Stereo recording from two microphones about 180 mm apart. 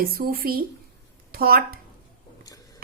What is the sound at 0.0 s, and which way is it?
A woman's voice, 55° right (ahead or behind).